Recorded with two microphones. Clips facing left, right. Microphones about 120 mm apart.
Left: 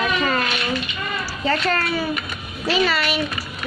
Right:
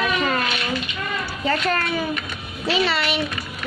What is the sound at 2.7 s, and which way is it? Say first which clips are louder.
Speech: left 1 dB; 25° right (ahead or behind).